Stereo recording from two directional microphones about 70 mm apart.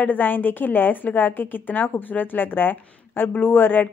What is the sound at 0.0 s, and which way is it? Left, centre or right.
A woman's voice, left.